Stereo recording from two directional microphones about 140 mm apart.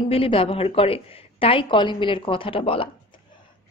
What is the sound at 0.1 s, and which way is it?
A woman's voice, 40° left (ahead or behind).